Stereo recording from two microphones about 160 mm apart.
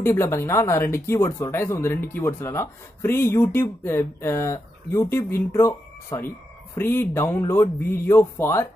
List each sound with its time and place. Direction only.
0.0 s speech: 15° left (ahead or behind)